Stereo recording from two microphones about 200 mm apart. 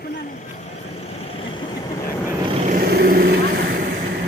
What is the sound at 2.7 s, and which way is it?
Vehicle, 45° right (ahead or behind).